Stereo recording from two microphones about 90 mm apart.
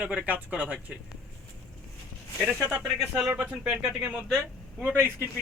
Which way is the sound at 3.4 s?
20° right (ahead or behind).